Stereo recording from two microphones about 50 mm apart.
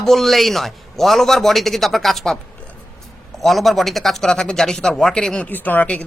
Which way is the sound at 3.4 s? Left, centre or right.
Centre.